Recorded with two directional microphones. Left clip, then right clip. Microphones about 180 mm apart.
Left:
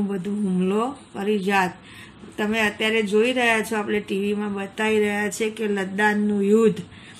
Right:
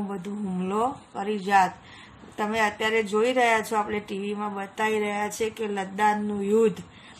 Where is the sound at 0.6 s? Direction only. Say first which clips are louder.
Left 1 dB; centre (ahead or behind).